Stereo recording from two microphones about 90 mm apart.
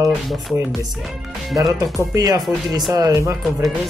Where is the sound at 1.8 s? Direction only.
40° right (ahead or behind).